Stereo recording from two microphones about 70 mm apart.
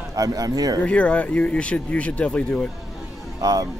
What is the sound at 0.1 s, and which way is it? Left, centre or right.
Speech, right.